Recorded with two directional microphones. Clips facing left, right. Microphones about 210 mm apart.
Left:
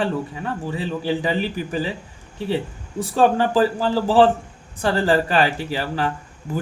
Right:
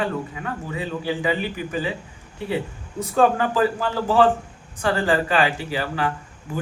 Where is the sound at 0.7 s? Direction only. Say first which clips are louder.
Left 2 dB; 35° left (ahead or behind).